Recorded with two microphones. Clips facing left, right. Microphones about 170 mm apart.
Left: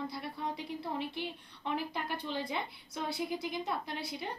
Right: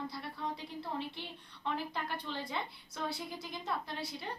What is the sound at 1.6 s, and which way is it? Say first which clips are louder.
A woman's voice: left 2 dB; 15° left (ahead or behind).